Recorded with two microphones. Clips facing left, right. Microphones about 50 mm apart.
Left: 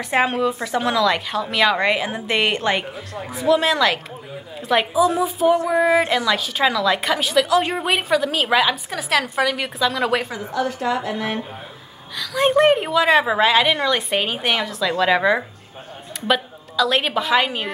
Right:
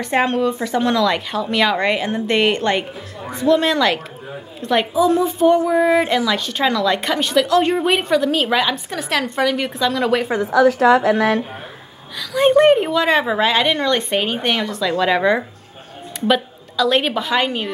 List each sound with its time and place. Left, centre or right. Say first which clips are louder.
0.0 s a woman's voice: right 2 dB; centre
10.4 s a woman's voice: right 9 dB; right
12.2 s a woman's voice: right 3 dB; centre